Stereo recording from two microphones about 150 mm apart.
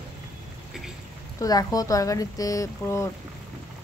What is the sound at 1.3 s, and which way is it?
Speech, 25° left (ahead or behind).